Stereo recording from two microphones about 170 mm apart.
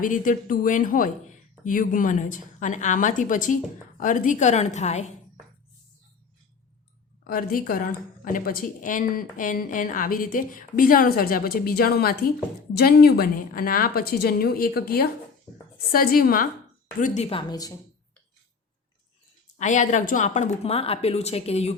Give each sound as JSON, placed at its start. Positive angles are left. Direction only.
{"t": 0.0, "sound": "a woman's voice", "side_deg": 50}
{"t": 7.3, "sound": "a woman's voice", "side_deg": 55}
{"t": 17.0, "sound": "speech", "side_deg": 40}
{"t": 17.5, "sound": "speech", "side_deg": 20}
{"t": 19.5, "sound": "speech", "side_deg": 45}